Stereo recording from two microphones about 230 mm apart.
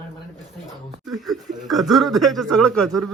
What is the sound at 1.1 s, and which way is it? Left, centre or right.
A man's voice, centre.